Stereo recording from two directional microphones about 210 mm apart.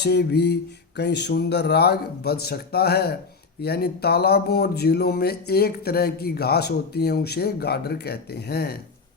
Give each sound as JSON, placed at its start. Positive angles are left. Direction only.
{"t": 0.0, "sound": "speech", "side_deg": 50}